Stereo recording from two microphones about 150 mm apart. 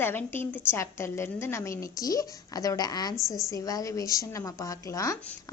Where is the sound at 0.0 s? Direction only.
15° left (ahead or behind).